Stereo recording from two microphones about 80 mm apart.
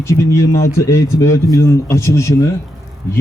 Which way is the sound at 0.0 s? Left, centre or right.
Left.